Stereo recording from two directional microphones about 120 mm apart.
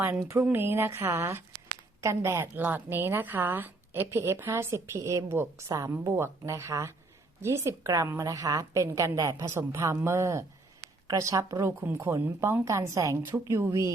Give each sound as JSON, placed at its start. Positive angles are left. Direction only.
{"t": 0.0, "sound": "a woman's voice", "side_deg": -20}